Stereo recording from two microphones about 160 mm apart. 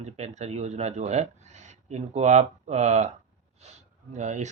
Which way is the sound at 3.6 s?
45° right (ahead or behind).